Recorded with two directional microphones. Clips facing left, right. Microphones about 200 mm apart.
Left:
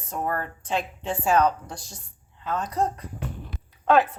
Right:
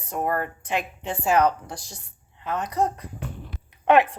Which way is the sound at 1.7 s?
80° right.